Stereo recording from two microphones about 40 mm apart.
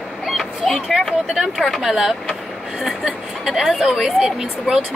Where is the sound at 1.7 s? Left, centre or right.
Centre.